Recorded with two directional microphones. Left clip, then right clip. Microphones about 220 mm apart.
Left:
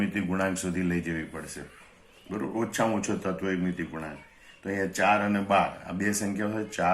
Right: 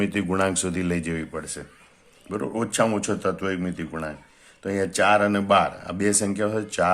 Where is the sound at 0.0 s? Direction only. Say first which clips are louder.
Right 6 dB; 50° right (ahead or behind).